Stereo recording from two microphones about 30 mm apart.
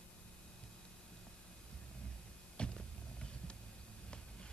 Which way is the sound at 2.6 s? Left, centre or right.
Left.